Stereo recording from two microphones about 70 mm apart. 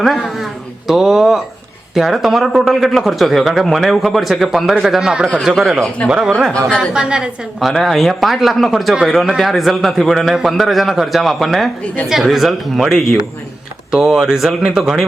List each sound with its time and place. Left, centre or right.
0.0 s a man's voice: centre
6.1 s a woman's voice: centre
7.6 s speech: centre